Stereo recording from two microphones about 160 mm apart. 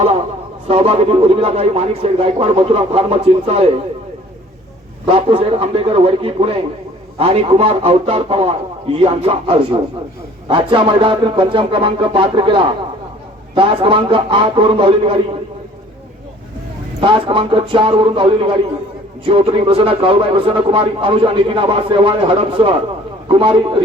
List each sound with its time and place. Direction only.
0.7 s speech: 40° right (ahead or behind)
5.0 s speech: 35° right (ahead or behind)
17.0 s speech: 35° right (ahead or behind)